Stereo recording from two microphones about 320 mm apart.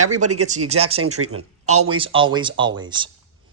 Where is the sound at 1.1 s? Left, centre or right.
Right.